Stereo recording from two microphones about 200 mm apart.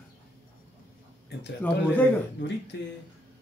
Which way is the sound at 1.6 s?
10° left (ahead or behind).